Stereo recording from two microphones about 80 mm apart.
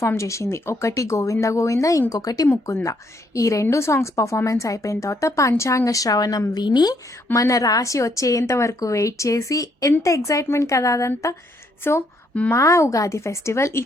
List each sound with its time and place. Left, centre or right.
0.0 s a woman's voice: left
2.7 s a woman's voice: left
6.5 s speech: left
7.3 s a woman's voice: left
11.8 s a woman's voice: left